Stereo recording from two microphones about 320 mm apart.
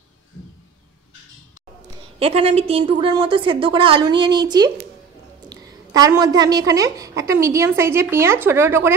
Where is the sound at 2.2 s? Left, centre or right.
Centre.